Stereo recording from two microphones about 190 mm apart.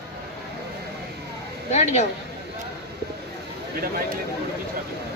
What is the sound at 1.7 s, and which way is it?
Speech, 35° left (ahead or behind).